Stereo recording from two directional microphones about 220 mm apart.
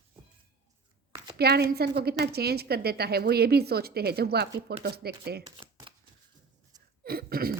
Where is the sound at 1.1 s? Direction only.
15° right (ahead or behind).